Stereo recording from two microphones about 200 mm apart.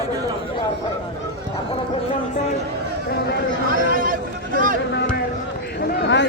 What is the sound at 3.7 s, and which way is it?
Speech, 45° right (ahead or behind).